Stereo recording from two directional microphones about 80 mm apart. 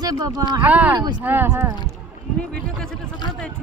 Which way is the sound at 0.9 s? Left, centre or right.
Right.